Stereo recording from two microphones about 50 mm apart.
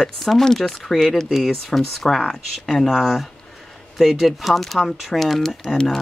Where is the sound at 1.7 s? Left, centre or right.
Centre.